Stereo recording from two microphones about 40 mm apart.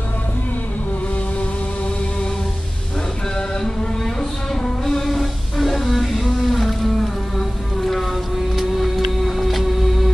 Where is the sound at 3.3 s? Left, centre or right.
Centre.